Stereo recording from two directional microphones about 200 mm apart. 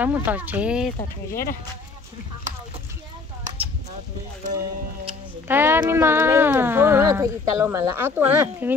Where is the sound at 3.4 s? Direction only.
35° right (ahead or behind).